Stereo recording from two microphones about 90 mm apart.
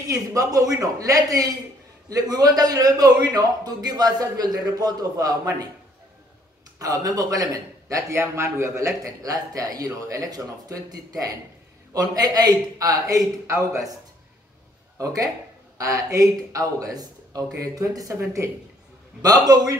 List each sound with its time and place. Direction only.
0.1 s a man's voice: 40° right (ahead or behind)
6.8 s a man's voice: 45° right (ahead or behind)
15.0 s a man's voice: 40° right (ahead or behind)